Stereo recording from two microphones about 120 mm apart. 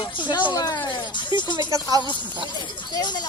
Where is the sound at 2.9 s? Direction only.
35° left (ahead or behind).